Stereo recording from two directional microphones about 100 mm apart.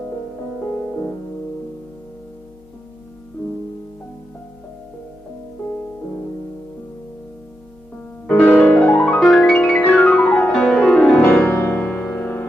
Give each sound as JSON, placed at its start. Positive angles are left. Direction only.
{"t": 8.3, "sound": "piano", "side_deg": 15}
{"t": 11.2, "sound": "music", "side_deg": 25}